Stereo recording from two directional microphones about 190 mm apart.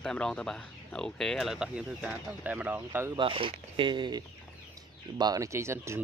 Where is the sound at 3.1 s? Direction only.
25° right (ahead or behind).